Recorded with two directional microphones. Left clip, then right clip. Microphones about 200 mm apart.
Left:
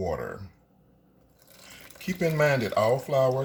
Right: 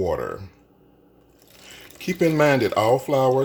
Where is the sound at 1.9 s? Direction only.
45° right (ahead or behind).